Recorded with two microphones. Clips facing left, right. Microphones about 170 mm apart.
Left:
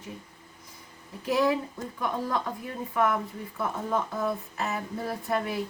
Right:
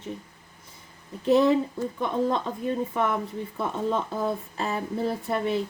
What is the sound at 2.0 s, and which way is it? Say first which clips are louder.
Speech: right 4 dB; 25° right (ahead or behind).